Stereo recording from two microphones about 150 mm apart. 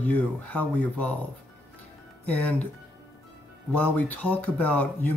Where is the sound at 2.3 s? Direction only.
10° left (ahead or behind).